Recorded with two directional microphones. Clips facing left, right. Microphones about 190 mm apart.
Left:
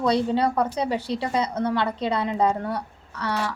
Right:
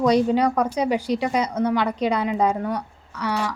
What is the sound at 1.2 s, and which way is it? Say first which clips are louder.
Speech: right 2 dB; 15° right (ahead or behind).